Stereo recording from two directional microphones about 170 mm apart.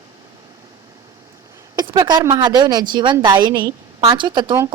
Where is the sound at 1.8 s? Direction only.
25° right (ahead or behind).